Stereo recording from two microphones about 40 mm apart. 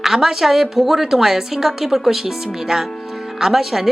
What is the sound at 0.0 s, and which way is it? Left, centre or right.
A woman's voice, centre.